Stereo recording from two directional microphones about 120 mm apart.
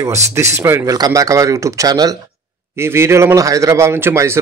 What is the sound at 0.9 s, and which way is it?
A man's voice, 30° right (ahead or behind).